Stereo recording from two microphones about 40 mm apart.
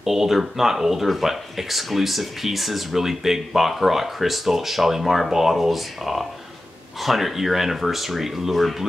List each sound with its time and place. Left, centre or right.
0.0 s speech: centre